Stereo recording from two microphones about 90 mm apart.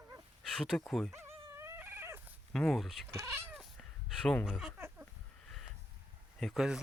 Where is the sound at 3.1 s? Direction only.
30° right (ahead or behind).